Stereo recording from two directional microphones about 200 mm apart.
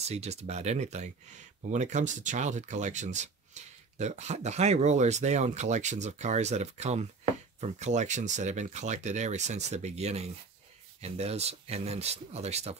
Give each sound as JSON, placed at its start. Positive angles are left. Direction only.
{"t": 0.0, "sound": "speech", "side_deg": -35}